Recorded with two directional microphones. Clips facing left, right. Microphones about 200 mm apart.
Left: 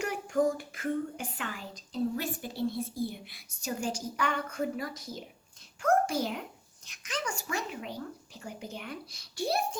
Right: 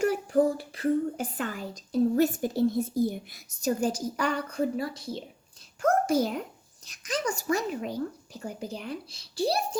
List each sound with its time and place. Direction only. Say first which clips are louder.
0.0 s speech: right 5 dB; 35° right (ahead or behind)
5.8 s a child's voice: right 3 dB; 40° right (ahead or behind)